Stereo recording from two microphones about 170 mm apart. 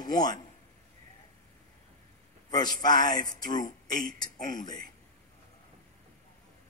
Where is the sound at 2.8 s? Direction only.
25° left (ahead or behind).